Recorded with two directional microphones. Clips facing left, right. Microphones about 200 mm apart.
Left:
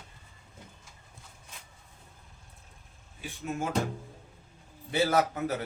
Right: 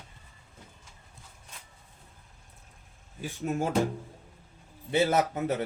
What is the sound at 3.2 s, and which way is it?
Speech, 40° right (ahead or behind).